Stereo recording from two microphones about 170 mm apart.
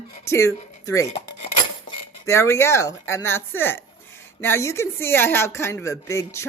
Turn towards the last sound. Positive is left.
turn(degrees=15)  # may be behind; listen again after turning